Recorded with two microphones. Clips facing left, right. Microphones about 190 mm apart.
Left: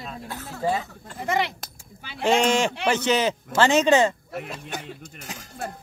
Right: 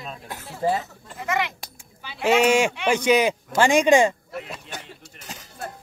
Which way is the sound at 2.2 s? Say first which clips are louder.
Right 2 dB; 10° right (ahead or behind).